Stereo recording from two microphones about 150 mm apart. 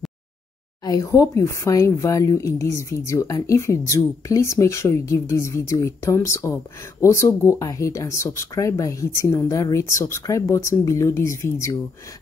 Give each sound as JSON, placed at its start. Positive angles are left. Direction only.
{"t": 0.8, "sound": "speech", "side_deg": 20}